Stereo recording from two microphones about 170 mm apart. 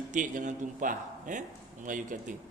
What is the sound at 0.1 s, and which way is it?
A man's voice, 45° right (ahead or behind).